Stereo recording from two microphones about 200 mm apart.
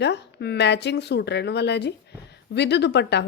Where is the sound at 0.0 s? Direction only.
60° left (ahead or behind).